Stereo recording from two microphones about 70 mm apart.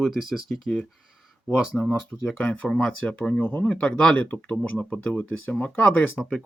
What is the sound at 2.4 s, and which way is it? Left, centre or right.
Speech, centre.